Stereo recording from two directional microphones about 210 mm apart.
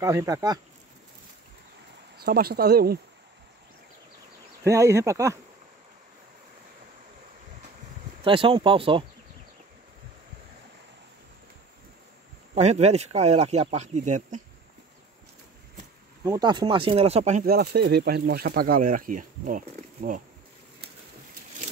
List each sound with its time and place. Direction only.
0.0 s speech: 15° right (ahead or behind)
2.1 s speech: 45° right (ahead or behind)
4.6 s speech: 15° right (ahead or behind)
8.2 s speech: 25° right (ahead or behind)
12.5 s speech: 30° right (ahead or behind)
16.3 s speech: 20° right (ahead or behind); by 20.2 s 40° right (ahead or behind)